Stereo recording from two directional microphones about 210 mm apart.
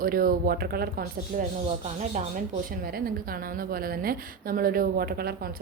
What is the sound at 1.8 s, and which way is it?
A woman's voice, 35° right (ahead or behind).